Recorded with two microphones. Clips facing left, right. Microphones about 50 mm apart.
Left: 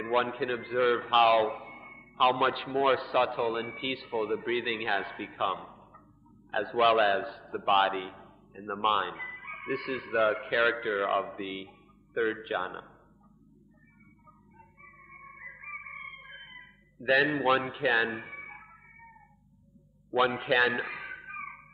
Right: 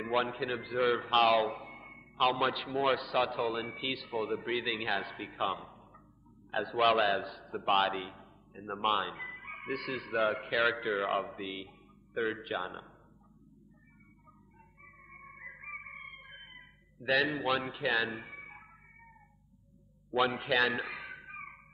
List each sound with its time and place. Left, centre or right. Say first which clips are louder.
0.0 s a man's voice: left 3 dB; centre
15.0 s music: left 2 dB; centre
15.9 s a sound: left 4 dB; centre
17.6 s a man's voice: left 5 dB; centre
18.4 s a sound: left 4 dB; centre
20.1 s a man's voice: left 3 dB; centre